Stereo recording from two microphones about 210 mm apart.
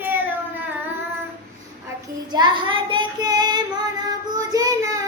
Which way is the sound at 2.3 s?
20° right (ahead or behind).